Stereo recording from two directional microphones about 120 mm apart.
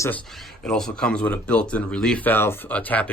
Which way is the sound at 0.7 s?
5° left (ahead or behind).